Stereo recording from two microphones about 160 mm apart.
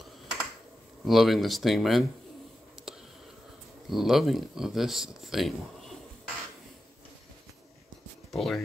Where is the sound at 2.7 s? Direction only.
5° right (ahead or behind).